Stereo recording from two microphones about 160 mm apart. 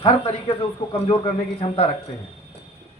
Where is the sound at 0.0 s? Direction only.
35° left (ahead or behind).